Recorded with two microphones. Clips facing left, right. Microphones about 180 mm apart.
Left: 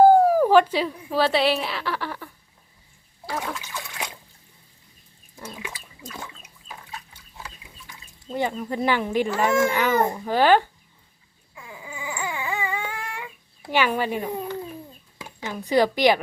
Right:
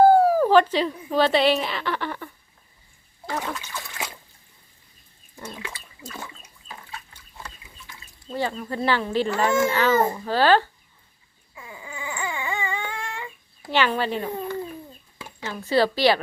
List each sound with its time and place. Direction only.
0.0 s a woman's voice: 15° left (ahead or behind)
3.9 s trickle: 15° left (ahead or behind)
5.4 s a sound: 10° left (ahead or behind)
6.7 s pig: centre (ahead or behind)
9.6 s a child's voice: 15° left (ahead or behind)
11.5 s a sound: centre (ahead or behind)
15.2 s speech: 15° left (ahead or behind)